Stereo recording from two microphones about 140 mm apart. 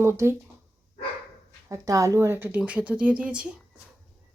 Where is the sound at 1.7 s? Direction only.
25° right (ahead or behind); by 3.6 s 5° right (ahead or behind).